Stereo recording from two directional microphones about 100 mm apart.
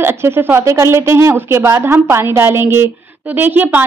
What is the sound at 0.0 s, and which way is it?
A woman's voice, 25° right (ahead or behind).